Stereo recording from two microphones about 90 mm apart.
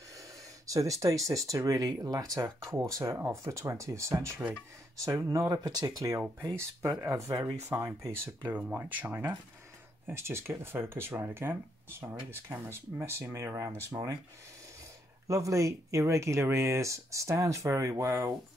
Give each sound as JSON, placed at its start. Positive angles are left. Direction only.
{"t": 0.2, "sound": "speech", "side_deg": -40}
{"t": 2.4, "sound": "speech", "side_deg": -30}
{"t": 5.6, "sound": "speech", "side_deg": -45}
{"t": 15.2, "sound": "speech", "side_deg": -35}